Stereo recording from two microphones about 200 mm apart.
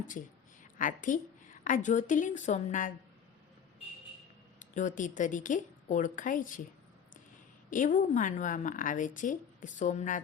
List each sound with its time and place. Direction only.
0.8 s a woman's voice: 40° left (ahead or behind)
4.6 s a woman's voice: 40° left (ahead or behind)
7.7 s a woman's voice: 40° left (ahead or behind)